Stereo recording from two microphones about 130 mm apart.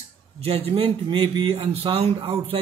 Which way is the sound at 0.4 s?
50° right (ahead or behind).